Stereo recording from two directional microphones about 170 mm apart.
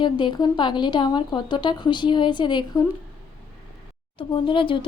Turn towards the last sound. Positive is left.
turn(degrees=30)  # may be behind; listen again after turning